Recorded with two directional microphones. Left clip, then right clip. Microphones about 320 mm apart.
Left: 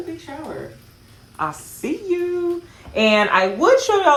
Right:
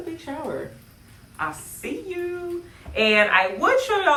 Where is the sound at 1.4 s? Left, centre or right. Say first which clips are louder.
Left 4 dB; centre.